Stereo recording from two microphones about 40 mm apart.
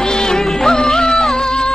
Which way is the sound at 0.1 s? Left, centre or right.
Centre.